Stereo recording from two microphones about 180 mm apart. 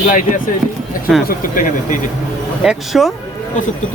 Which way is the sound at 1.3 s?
50° left (ahead or behind).